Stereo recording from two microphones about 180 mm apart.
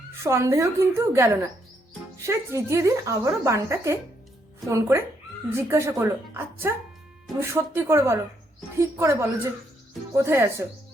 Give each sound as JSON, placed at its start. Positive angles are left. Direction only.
{"t": 0.2, "sound": "a woman's voice", "side_deg": -15}